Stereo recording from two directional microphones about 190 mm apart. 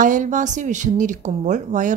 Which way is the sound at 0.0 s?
40° right (ahead or behind).